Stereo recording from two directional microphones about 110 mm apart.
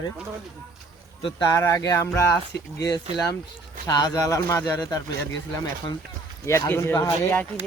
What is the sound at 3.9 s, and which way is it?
Speech, 35° left (ahead or behind).